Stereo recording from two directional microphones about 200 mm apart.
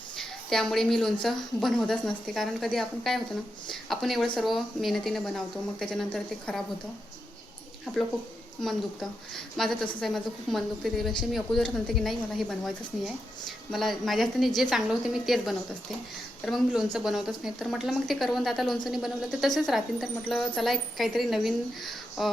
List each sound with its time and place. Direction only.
0.2 s a woman's voice: centre (ahead or behind)
7.9 s a woman's voice: centre (ahead or behind)